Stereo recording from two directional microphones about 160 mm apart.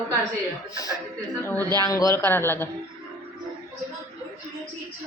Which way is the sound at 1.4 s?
15° left (ahead or behind).